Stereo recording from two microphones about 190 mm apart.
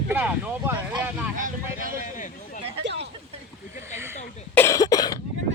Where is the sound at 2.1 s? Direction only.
40° left (ahead or behind).